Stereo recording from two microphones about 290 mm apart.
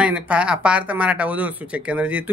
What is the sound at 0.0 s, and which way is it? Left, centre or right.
Speech, centre.